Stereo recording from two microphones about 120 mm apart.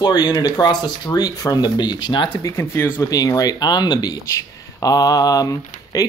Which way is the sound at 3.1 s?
30° left (ahead or behind).